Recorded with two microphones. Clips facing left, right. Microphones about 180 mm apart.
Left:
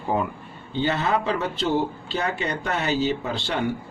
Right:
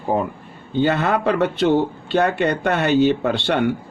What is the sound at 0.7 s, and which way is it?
Speech, 55° right (ahead or behind).